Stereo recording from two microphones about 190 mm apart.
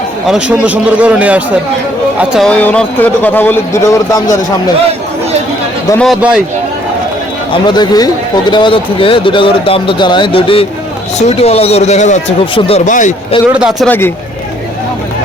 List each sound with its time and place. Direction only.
0.3 s a man's voice: 5° right (ahead or behind)
2.5 s speech: 5° left (ahead or behind)
6.0 s a man's voice: centre (ahead or behind)
7.5 s a man's voice: 20° left (ahead or behind); by 13.1 s 40° left (ahead or behind)
13.5 s a man's voice: 5° right (ahead or behind)